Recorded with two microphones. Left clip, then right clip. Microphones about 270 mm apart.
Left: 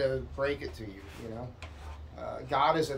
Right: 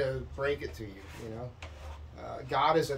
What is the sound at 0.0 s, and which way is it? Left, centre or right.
Speech, centre.